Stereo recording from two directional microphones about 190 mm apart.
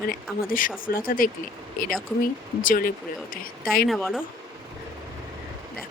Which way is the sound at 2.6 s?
50° left (ahead or behind).